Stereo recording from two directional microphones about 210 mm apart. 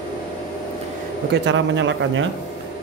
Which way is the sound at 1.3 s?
60° right (ahead or behind).